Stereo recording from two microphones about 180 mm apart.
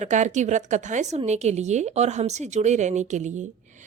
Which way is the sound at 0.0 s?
40° right (ahead or behind).